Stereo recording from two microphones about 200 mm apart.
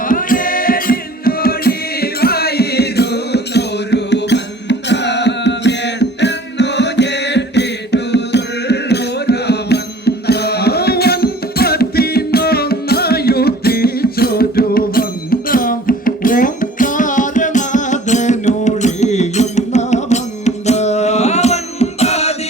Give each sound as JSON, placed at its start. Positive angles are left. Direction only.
{"t": 0.0, "sound": "music", "side_deg": 45}